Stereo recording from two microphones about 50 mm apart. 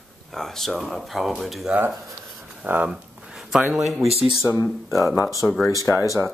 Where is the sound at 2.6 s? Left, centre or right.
Right.